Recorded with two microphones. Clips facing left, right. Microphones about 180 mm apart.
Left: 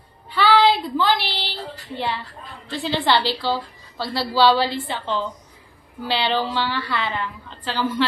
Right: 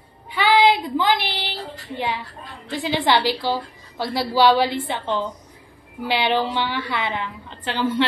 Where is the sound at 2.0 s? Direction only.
15° right (ahead or behind).